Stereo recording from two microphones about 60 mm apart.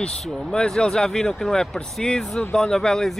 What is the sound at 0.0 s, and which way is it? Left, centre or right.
Speech, centre.